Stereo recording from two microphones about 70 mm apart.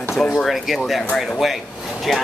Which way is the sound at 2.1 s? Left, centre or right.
Centre.